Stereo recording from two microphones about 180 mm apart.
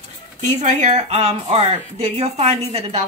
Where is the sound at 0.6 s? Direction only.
40° right (ahead or behind).